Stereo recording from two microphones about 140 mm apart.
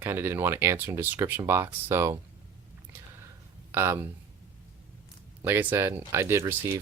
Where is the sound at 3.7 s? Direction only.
20° right (ahead or behind).